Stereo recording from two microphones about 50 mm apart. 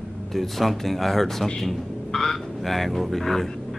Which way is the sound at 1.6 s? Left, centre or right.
Centre.